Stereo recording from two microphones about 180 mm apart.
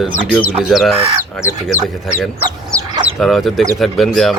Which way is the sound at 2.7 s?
5° left (ahead or behind).